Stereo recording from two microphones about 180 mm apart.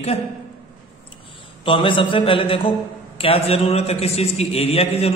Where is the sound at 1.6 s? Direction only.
30° left (ahead or behind).